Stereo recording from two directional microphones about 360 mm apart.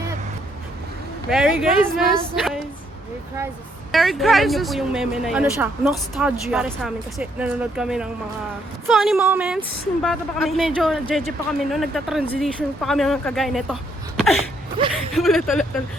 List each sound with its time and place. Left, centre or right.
1.3 s speech: centre
3.9 s speech: centre
14.8 s speech: centre
15.1 s speech: centre